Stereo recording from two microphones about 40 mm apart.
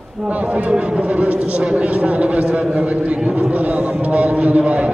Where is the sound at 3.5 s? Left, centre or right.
Right.